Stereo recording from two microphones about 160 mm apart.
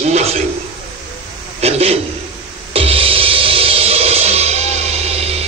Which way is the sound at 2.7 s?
35° right (ahead or behind).